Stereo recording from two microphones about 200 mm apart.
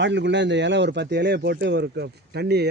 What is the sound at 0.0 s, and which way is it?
A man's voice, 60° right (ahead or behind).